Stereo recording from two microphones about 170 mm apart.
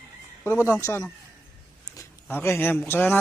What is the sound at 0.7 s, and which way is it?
Speech, 15° left (ahead or behind).